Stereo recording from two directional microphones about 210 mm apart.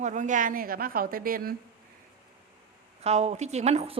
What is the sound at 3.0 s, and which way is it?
A woman's voice, 30° right (ahead or behind).